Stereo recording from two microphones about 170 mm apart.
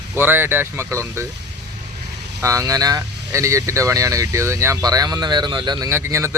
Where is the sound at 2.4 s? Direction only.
20° right (ahead or behind).